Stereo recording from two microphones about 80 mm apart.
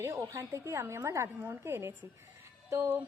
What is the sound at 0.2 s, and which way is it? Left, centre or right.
A woman's voice, right.